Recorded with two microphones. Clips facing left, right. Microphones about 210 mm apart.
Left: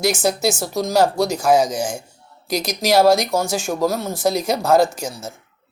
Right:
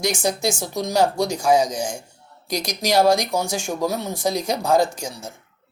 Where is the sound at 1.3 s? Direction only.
5° left (ahead or behind).